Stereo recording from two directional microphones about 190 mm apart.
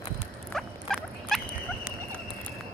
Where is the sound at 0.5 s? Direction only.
Centre (ahead or behind).